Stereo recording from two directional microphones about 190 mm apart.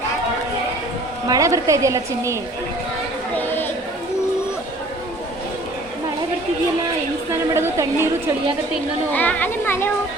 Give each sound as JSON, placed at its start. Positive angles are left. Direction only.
{"t": 1.3, "sound": "a woman's voice", "side_deg": -15}
{"t": 3.3, "sound": "chatter", "side_deg": 10}
{"t": 7.5, "sound": "a sound", "side_deg": -15}
{"t": 9.1, "sound": "speech", "side_deg": 10}